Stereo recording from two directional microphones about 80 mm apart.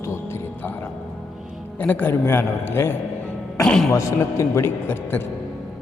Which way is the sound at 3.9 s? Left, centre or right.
Left.